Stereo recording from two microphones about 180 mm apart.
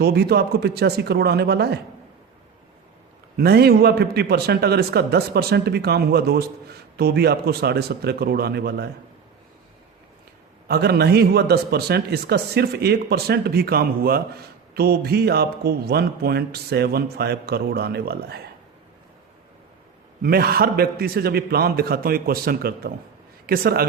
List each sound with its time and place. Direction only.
0.0 s a man's voice: 60° right (ahead or behind)
3.3 s a man's voice: 60° right (ahead or behind)
10.7 s a man's voice: 60° right (ahead or behind)
20.2 s a man's voice: 60° right (ahead or behind)